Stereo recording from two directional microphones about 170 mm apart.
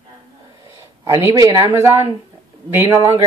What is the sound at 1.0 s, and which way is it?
Speech, 15° right (ahead or behind).